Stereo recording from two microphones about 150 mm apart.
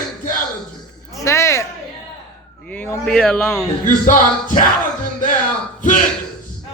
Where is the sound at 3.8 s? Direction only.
60° left (ahead or behind).